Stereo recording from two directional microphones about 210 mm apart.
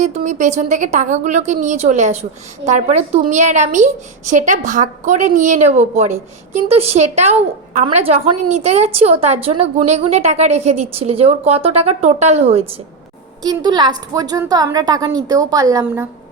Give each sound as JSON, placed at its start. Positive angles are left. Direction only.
{"t": 0.0, "sound": "a woman's voice", "side_deg": -35}